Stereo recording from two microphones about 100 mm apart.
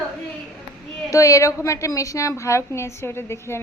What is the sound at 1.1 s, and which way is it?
A woman's voice, 30° left (ahead or behind).